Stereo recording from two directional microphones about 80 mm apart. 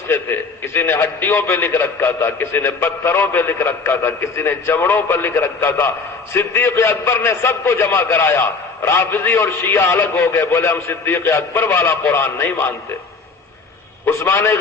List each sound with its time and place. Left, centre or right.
0.1 s a man's voice: left
14.0 s a man's voice: left